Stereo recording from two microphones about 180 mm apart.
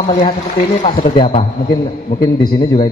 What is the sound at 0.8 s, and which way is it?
A man's voice, 30° left (ahead or behind).